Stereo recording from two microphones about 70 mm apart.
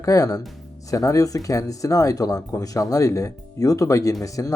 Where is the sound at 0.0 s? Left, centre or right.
Left.